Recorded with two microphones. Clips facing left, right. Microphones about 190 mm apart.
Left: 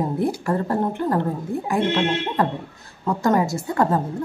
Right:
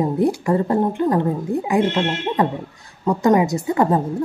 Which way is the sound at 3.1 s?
15° right (ahead or behind).